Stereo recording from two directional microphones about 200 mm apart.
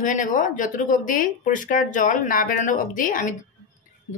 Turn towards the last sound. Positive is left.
turn(degrees=40)  # may be behind; listen again after turning